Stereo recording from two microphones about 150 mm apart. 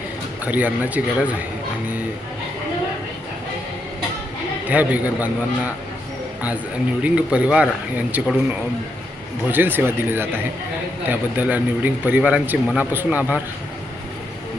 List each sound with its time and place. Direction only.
0.4 s a man's voice: 10° right (ahead or behind)
4.7 s a man's voice: 10° right (ahead or behind)
7.0 s a man's voice: 10° right (ahead or behind)
9.5 s a man's voice: 15° right (ahead or behind)